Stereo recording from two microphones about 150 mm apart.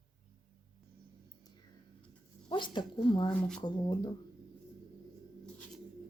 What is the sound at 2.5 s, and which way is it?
Speech, 30° left (ahead or behind).